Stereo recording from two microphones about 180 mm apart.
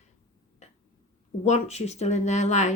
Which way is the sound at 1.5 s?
35° left (ahead or behind).